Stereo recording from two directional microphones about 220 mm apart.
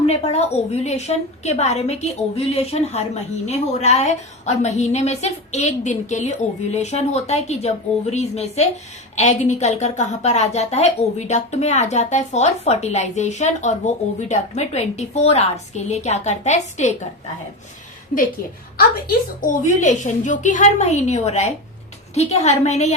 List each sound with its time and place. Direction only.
0.0 s a woman's voice: 30° left (ahead or behind)
19.4 s a woman's voice: 35° left (ahead or behind)